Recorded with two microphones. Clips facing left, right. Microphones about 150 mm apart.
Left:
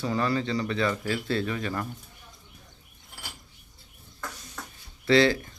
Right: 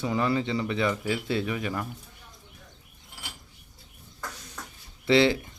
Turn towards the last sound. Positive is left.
turn(degrees=-20)  # may be behind; listen again after turning